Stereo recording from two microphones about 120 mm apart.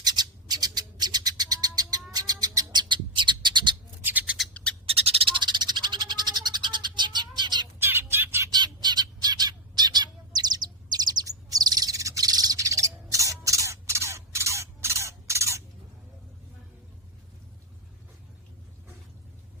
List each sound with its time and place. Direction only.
0.0 s bird: 35° right (ahead or behind)
4.0 s squawk: 15° right (ahead or behind)
4.4 s bird: 10° left (ahead or behind)
4.9 s cat: 55° right (ahead or behind); by 7.7 s 35° right (ahead or behind)
7.8 s bird: 20° right (ahead or behind)
8.4 s bird: 35° right (ahead or behind)